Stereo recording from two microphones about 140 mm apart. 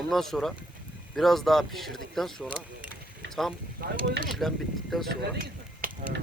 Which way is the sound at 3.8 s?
90° right.